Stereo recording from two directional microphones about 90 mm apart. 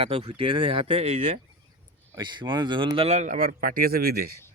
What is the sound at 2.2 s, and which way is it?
Speech, 60° right (ahead or behind).